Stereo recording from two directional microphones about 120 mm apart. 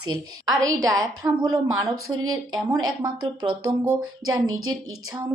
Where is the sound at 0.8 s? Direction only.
30° right (ahead or behind).